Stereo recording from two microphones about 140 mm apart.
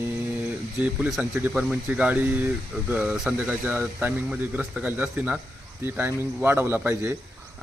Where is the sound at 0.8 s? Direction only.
5° right (ahead or behind).